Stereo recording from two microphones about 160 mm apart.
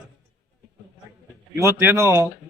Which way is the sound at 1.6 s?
15° right (ahead or behind).